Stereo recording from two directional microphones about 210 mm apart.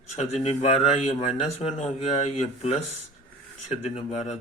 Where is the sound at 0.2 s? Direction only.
30° left (ahead or behind).